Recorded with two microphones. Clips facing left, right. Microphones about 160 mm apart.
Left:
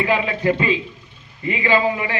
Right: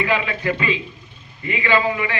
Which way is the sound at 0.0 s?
30° left (ahead or behind).